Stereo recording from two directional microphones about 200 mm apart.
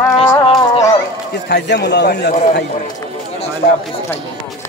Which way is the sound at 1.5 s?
55° left (ahead or behind).